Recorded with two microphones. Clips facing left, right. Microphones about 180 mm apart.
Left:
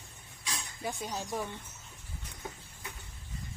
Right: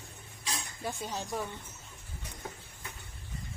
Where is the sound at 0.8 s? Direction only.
5° left (ahead or behind).